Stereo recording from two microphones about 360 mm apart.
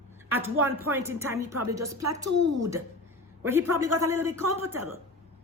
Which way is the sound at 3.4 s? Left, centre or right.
Centre.